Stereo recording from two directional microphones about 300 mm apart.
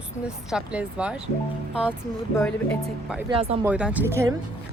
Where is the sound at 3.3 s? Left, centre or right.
Centre.